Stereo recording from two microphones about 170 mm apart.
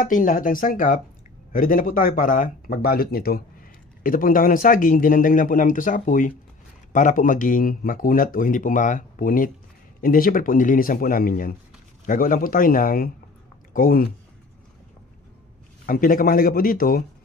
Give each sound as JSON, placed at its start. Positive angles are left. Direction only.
{"t": 0.0, "sound": "speech", "side_deg": 50}
{"t": 15.8, "sound": "speech", "side_deg": 55}